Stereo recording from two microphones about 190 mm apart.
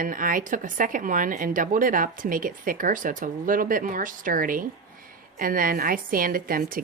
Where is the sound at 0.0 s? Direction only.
45° right (ahead or behind).